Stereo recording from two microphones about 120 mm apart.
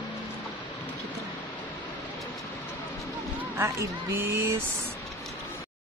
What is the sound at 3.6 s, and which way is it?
Speech, 25° right (ahead or behind).